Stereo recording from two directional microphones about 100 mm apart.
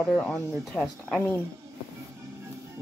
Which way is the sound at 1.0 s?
15° left (ahead or behind).